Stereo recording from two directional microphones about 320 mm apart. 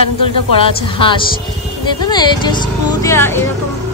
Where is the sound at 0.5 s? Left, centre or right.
Centre.